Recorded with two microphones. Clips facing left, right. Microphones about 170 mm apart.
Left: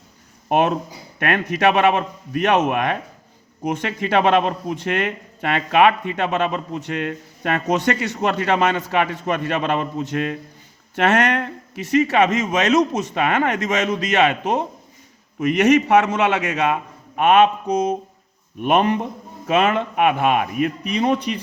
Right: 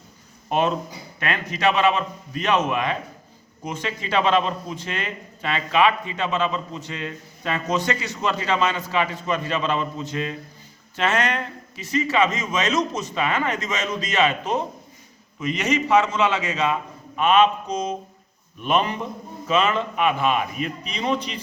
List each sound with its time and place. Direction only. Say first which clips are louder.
0.4 s a man's voice: left 4 dB; 55° left (ahead or behind)
18.6 s a man's voice: left 5 dB; 55° left (ahead or behind)